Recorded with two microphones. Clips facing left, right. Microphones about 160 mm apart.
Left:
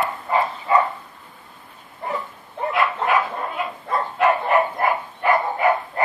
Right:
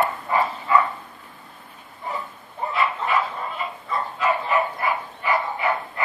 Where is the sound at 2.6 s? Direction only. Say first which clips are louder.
Left 3 dB; 60° left (ahead or behind).